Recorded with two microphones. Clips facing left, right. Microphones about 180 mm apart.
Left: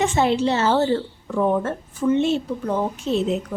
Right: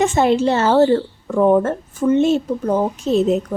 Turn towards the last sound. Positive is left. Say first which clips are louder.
# right 6 dB
turn(degrees=-45)  # may be behind; listen again after turning